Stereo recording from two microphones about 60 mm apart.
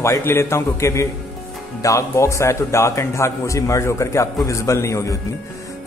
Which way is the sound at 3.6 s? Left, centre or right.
Left.